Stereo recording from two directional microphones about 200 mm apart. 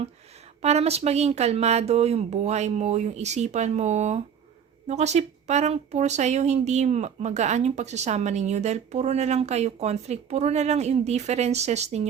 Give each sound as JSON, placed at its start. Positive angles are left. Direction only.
{"t": 0.6, "sound": "speech", "side_deg": -30}